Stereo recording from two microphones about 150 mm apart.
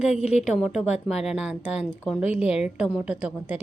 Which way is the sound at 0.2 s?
50° left (ahead or behind).